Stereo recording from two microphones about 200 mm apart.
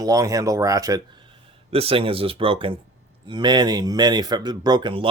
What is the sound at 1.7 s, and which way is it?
Speech, 30° right (ahead or behind).